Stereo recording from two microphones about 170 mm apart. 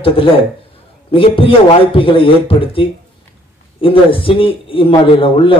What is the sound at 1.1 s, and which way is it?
A man's voice, 30° left (ahead or behind).